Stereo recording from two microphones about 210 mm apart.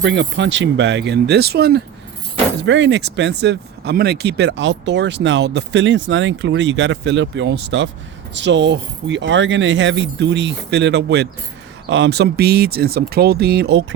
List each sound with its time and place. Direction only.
0.0 s speech: 60° right (ahead or behind)